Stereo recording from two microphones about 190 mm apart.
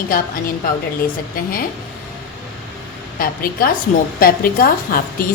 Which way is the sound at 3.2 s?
50° left (ahead or behind).